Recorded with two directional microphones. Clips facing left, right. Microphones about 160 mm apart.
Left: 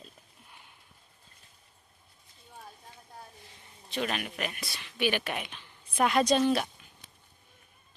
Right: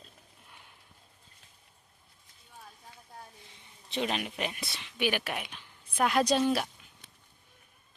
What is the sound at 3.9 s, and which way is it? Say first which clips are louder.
Speech: right 1 dB; 20° right (ahead or behind).